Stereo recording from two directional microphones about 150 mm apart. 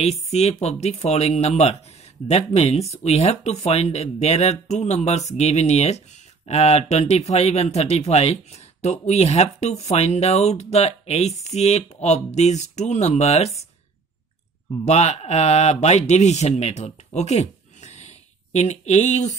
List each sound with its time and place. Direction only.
0.0 s speech: 45° left (ahead or behind)
14.9 s speech: 45° left (ahead or behind)